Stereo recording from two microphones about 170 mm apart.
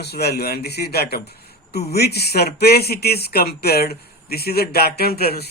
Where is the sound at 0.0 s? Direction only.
70° left (ahead or behind).